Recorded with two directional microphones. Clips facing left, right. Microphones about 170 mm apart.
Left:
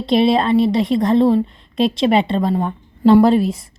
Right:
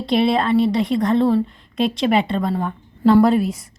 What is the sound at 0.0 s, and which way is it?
A woman's voice, 20° left (ahead or behind).